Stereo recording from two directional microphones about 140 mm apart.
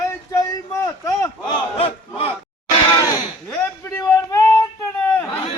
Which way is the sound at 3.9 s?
20° left (ahead or behind).